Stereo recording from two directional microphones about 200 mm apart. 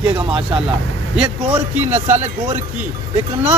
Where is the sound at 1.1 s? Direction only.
5° right (ahead or behind).